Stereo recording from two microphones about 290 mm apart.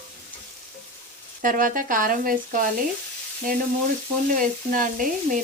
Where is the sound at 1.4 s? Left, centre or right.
Right.